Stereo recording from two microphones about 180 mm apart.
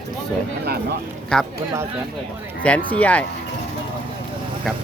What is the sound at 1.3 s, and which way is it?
Speech, 5° left (ahead or behind).